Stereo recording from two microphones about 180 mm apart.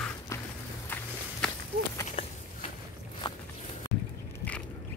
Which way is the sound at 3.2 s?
25° left (ahead or behind).